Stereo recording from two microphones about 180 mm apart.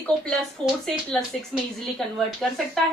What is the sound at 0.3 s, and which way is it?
A woman's voice, centre (ahead or behind).